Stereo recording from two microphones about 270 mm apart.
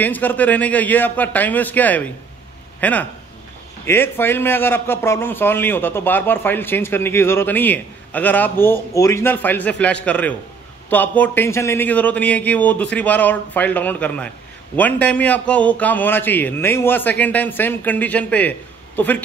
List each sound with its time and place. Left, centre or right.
0.0 s a man's voice: centre